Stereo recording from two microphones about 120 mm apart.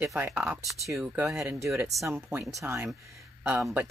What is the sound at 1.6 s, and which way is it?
Speech, 25° right (ahead or behind).